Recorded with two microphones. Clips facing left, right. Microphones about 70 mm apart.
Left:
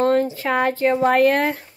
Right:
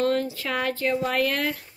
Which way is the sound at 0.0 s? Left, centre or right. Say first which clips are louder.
Left 6 dB; left.